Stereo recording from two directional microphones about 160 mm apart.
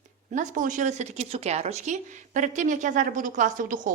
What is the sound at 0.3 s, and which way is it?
A woman's voice, 55° right (ahead or behind).